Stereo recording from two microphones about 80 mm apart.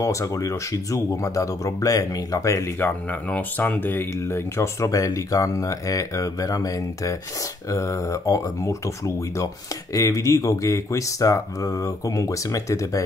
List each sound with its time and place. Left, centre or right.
0.0 s speech: left
2.8 s speech: left